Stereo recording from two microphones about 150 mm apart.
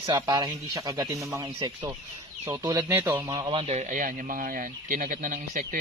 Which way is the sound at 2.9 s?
15° right (ahead or behind).